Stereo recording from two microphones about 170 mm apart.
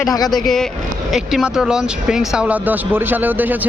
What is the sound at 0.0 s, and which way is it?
Speech, 20° left (ahead or behind).